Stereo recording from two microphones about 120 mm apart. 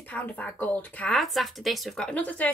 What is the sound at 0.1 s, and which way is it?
A woman's voice, 10° left (ahead or behind).